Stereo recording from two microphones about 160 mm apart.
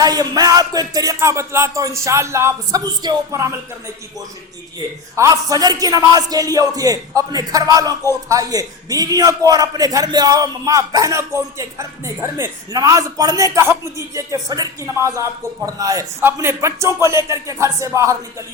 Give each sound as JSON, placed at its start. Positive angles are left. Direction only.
{"t": 0.0, "sound": "a man's voice", "side_deg": -25}
{"t": 5.1, "sound": "a man's voice", "side_deg": -20}